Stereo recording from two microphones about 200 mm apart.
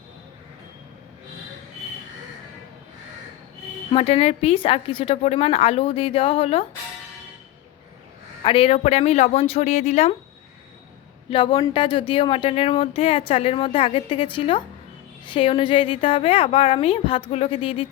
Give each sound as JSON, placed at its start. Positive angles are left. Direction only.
{"t": 3.9, "sound": "speech", "side_deg": 30}
{"t": 8.4, "sound": "speech", "side_deg": 30}
{"t": 11.3, "sound": "speech", "side_deg": 25}